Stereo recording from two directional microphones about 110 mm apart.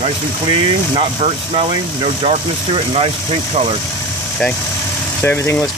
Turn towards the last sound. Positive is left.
turn(degrees=25)  # may be behind; listen again after turning